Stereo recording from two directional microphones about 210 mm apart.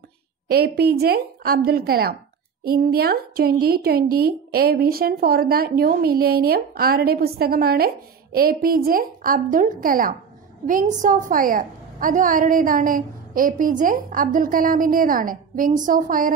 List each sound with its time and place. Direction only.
0.5 s a woman's voice: 45° right (ahead or behind)